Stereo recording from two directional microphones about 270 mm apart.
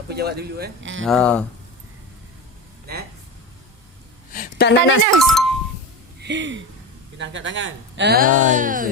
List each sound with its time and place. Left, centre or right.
0.1 s speech: right
1.0 s speech: centre
4.3 s a sound: left
5.2 s speech: centre
6.1 s a sound: right
7.2 s speech: right